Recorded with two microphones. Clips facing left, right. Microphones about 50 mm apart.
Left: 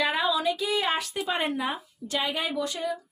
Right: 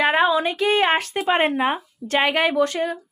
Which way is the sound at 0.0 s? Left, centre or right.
Right.